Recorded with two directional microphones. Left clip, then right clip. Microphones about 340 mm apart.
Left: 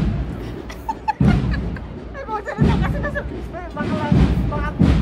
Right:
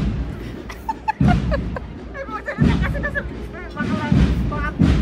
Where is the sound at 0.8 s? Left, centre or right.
Centre.